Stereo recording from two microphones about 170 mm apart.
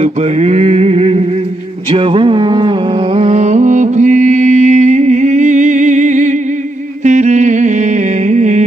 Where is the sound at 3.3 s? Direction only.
45° right (ahead or behind).